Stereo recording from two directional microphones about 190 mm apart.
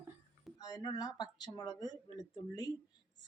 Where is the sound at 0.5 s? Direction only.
20° left (ahead or behind).